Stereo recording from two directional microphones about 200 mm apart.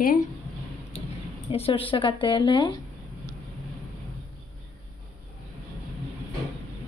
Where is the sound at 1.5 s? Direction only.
30° left (ahead or behind).